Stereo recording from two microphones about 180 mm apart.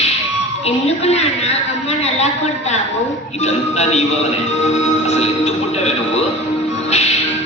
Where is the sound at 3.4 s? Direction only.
40° left (ahead or behind).